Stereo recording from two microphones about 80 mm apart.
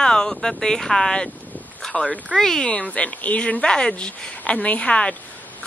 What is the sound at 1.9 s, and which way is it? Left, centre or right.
A woman's voice, centre.